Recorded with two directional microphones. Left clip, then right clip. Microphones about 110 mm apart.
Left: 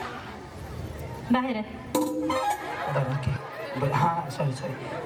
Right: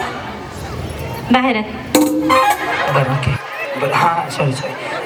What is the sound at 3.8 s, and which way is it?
Speech, 25° right (ahead or behind).